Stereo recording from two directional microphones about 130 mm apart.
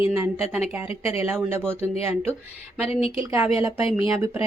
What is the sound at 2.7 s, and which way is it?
Speech, 50° left (ahead or behind).